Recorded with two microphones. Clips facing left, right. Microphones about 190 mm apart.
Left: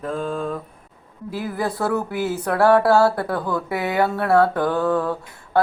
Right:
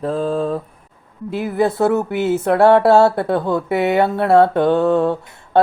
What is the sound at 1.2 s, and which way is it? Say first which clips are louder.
Speech: right 7 dB; 25° right (ahead or behind).